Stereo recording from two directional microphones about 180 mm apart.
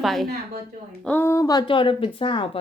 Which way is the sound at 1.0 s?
10° left (ahead or behind).